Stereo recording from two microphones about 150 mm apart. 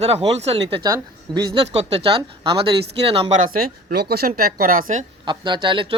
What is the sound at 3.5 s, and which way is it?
Speech, 75° right (ahead or behind).